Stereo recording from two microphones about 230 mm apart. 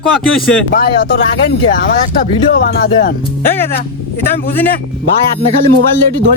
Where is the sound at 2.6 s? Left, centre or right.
Left.